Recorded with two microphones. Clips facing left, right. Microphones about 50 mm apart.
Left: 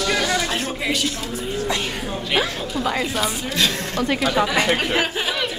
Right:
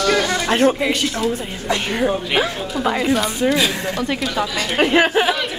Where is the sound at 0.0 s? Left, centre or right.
Centre.